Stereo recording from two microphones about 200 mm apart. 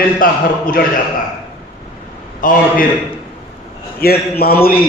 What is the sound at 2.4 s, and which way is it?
Speech, 45° left (ahead or behind).